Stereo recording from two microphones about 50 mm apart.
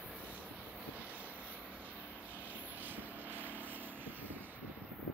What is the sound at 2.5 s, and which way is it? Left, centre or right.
Vehicle, right.